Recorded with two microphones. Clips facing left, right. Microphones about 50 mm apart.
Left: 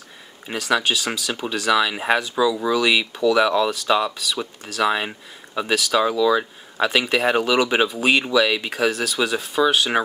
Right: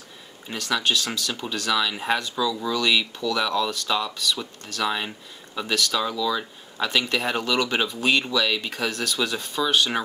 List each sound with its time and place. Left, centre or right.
0.5 s speech: centre